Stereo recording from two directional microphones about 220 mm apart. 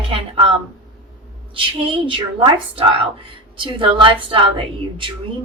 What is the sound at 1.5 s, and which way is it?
A woman's voice, 25° right (ahead or behind).